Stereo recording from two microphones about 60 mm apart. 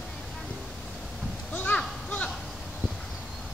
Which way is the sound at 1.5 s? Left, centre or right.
Left.